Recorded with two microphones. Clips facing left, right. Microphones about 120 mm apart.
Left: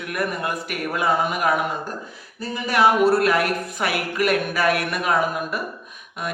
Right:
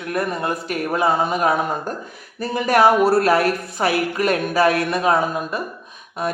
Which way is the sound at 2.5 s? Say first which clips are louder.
Right 3 dB; 45° right (ahead or behind).